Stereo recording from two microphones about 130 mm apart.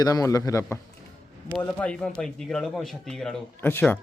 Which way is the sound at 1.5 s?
5° left (ahead or behind).